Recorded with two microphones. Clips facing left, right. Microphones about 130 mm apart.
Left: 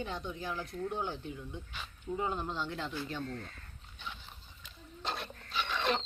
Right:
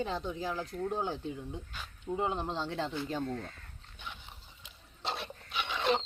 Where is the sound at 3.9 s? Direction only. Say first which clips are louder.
Even; 10° right (ahead or behind).